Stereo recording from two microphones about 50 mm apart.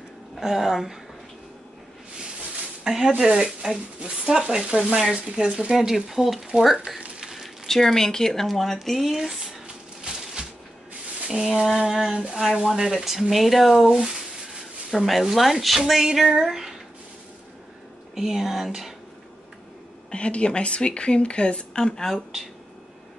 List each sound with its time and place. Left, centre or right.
0.4 s speech: centre
2.8 s speech: centre
5.8 s a woman's voice: centre
7.0 s a sound: centre
7.6 s a woman's voice: centre
11.6 s speech: centre
13.8 s speech: centre
14.9 s a woman's voice: centre
18.1 s speech: centre
20.1 s speech: left